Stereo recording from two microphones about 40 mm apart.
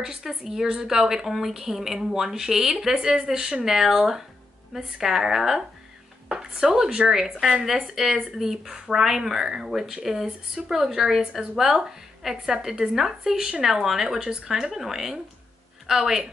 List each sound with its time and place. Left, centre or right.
0.0 s a woman's voice: centre
0.3 s speech: centre
6.3 s speech: centre